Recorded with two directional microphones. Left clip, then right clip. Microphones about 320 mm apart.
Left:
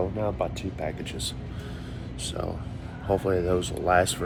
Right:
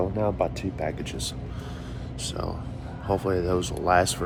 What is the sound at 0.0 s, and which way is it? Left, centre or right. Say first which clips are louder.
Speech: right 3 dB; centre.